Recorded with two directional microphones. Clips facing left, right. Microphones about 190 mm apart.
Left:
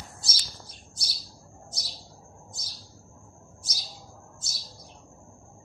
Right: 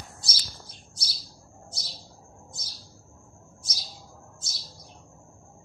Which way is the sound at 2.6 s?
Centre (ahead or behind).